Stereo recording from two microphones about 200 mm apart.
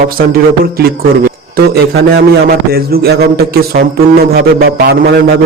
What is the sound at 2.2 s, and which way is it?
A man's voice, 50° right (ahead or behind).